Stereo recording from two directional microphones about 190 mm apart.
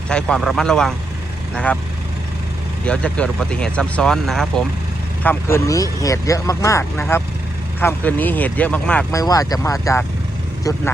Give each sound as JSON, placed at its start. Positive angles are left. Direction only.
{"t": 0.1, "sound": "speech", "side_deg": 5}
{"t": 2.8, "sound": "speech", "side_deg": 5}
{"t": 9.2, "sound": "speech", "side_deg": 20}